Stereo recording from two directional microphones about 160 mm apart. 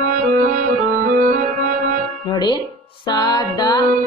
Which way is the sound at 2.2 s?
25° left (ahead or behind).